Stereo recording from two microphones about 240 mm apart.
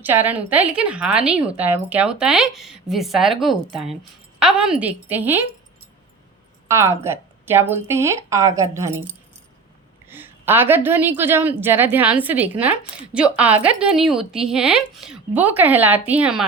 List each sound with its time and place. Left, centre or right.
0.0 s a woman's voice: centre
6.7 s a woman's voice: centre